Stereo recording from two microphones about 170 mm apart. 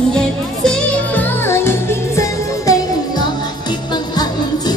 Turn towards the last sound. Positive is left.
turn(degrees=20)  # may be behind; listen again after turning